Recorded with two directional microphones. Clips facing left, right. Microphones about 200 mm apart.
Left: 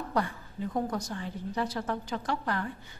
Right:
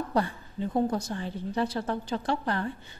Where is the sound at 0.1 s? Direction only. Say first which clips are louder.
Right 3 dB; 30° right (ahead or behind).